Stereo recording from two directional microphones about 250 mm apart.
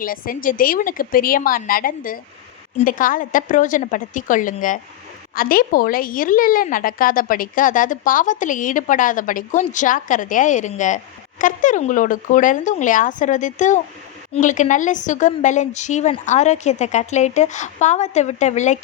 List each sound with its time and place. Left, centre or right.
0.0 s a woman's voice: left